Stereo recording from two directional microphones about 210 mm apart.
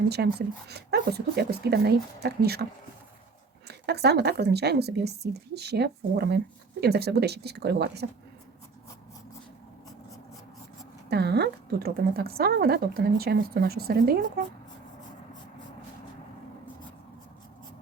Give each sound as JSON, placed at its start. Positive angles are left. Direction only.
{"t": 0.1, "sound": "a woman's voice", "side_deg": -50}
{"t": 3.7, "sound": "a woman's voice", "side_deg": -50}
{"t": 11.1, "sound": "a woman's voice", "side_deg": -50}